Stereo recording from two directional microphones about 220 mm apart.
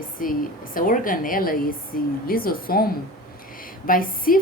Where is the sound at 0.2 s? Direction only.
40° left (ahead or behind).